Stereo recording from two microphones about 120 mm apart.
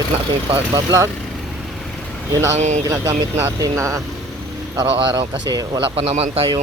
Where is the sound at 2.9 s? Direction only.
20° right (ahead or behind).